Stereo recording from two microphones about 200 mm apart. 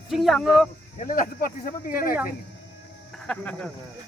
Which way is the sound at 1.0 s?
45° left (ahead or behind).